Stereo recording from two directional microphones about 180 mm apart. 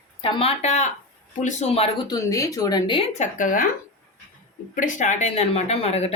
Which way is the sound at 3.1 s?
45° left (ahead or behind).